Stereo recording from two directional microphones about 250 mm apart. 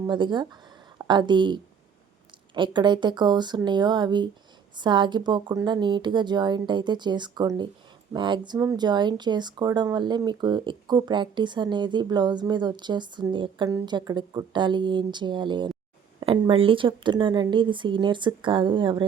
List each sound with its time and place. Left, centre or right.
0.1 s a woman's voice: centre